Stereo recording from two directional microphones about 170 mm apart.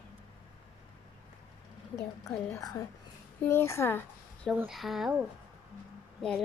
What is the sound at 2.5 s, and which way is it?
A woman's voice, 20° left (ahead or behind).